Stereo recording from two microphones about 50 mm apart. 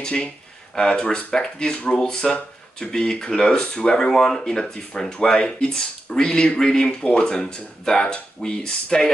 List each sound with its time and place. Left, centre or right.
0.0 s speech: left
4.1 s speech: centre